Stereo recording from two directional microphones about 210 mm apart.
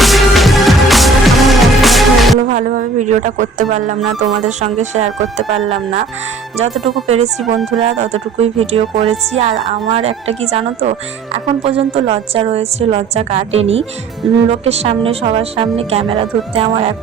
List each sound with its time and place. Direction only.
0.0 s music: centre (ahead or behind)
2.5 s a sound: 40° right (ahead or behind)
4.2 s speech: 35° right (ahead or behind)
7.1 s speech: 30° right (ahead or behind)